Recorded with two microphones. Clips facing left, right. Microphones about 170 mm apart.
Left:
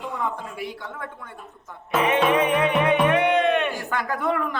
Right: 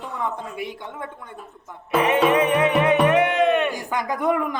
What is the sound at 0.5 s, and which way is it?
Speech, 20° right (ahead or behind).